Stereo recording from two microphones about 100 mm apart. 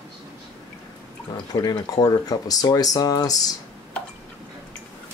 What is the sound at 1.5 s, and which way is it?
Speech, 40° left (ahead or behind).